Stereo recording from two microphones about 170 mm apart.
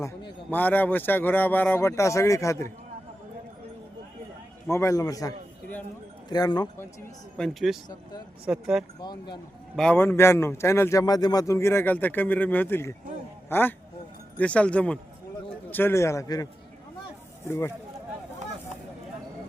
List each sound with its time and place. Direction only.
0.0 s a sound: 25° left (ahead or behind)
0.5 s a man's voice: 10° left (ahead or behind)
4.7 s a man's voice: 15° left (ahead or behind)
7.3 s speech: centre (ahead or behind)
9.0 s a man's voice: 25° left (ahead or behind)
9.7 s a man's voice: 5° left (ahead or behind)